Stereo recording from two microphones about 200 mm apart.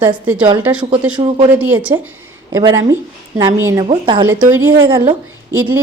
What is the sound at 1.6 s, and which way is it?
A woman's voice, 10° right (ahead or behind).